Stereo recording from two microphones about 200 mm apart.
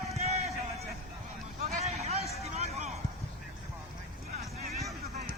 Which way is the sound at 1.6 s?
30° right (ahead or behind).